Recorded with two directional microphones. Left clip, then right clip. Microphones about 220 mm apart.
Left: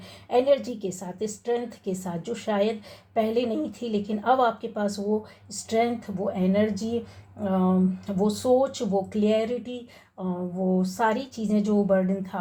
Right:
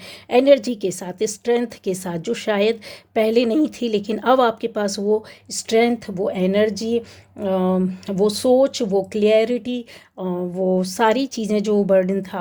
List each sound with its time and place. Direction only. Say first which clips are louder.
0.3 s speech: right 7 dB; 50° right (ahead or behind)